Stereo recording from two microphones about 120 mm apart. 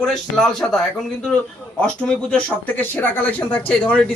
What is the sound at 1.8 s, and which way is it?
Speech, 10° left (ahead or behind).